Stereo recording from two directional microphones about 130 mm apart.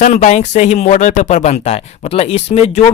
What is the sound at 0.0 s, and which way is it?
Speech, 65° left (ahead or behind).